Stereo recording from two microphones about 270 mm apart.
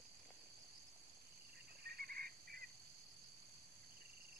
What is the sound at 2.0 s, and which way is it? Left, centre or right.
Fowl, right.